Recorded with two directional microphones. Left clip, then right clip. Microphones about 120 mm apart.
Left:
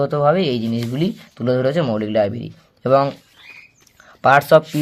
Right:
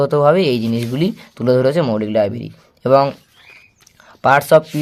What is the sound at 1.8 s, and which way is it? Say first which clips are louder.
Speech: right 2 dB; 20° right (ahead or behind).